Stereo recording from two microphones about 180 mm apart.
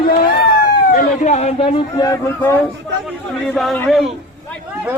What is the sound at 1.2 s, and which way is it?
Speech, 35° left (ahead or behind).